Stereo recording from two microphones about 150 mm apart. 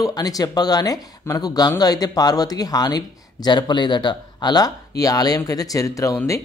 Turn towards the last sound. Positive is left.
turn(degrees=20)  # may be behind; listen again after turning